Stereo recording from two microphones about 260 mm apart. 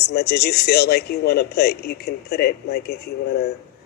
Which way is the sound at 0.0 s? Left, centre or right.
Left.